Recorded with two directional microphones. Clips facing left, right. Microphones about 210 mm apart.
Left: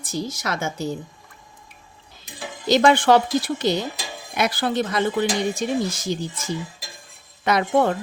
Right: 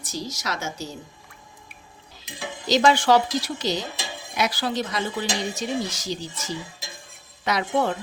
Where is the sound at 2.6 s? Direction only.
55° left (ahead or behind).